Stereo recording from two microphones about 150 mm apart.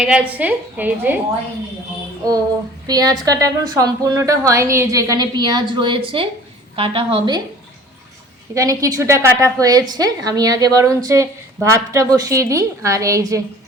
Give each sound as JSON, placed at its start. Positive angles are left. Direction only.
{"t": 0.0, "sound": "a woman's voice", "side_deg": -10}
{"t": 2.8, "sound": "a woman's voice", "side_deg": -25}
{"t": 8.5, "sound": "a woman's voice", "side_deg": -20}